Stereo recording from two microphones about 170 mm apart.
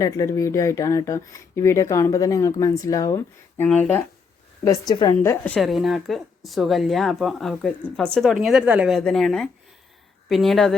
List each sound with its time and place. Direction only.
0.0 s speech: 20° left (ahead or behind)
3.6 s a woman's voice: 10° left (ahead or behind)
4.6 s a woman's voice: 20° left (ahead or behind)
5.5 s speech: centre (ahead or behind)